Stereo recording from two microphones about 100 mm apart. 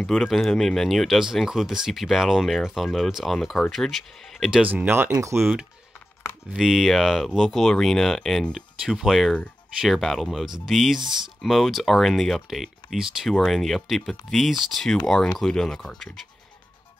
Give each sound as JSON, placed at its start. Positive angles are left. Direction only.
{"t": 0.0, "sound": "speech", "side_deg": 5}
{"t": 4.5, "sound": "speech", "side_deg": -10}
{"t": 5.4, "sound": "speech", "side_deg": -5}